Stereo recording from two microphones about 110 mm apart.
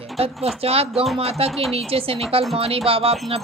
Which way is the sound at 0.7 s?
60° right (ahead or behind).